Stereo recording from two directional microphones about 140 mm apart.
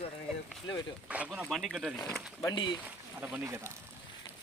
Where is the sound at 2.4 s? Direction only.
30° left (ahead or behind).